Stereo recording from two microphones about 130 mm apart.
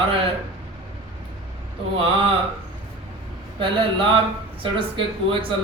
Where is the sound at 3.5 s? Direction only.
40° right (ahead or behind).